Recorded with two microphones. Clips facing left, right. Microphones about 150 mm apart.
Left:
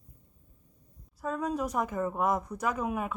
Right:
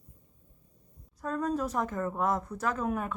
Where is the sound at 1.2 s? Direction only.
5° left (ahead or behind).